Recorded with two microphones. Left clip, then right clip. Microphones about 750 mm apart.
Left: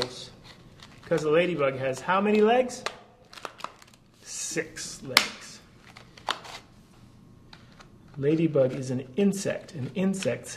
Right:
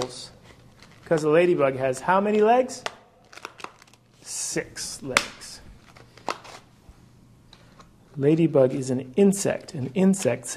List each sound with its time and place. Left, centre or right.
1.0 s speech: right
3.3 s a sound: right
8.2 s speech: right